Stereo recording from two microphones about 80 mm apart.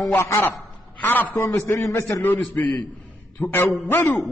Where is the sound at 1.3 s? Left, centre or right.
Left.